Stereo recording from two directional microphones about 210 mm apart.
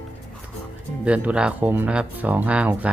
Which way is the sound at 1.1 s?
5° right (ahead or behind).